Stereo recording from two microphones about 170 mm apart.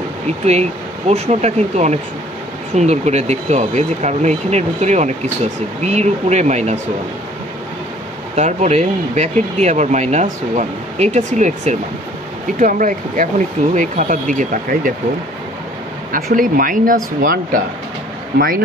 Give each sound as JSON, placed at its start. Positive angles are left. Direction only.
{"t": 0.5, "sound": "speech", "side_deg": -40}
{"t": 8.4, "sound": "speech", "side_deg": -40}
{"t": 16.1, "sound": "speech", "side_deg": -50}